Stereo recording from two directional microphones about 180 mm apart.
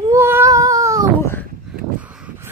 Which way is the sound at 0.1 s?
15° right (ahead or behind).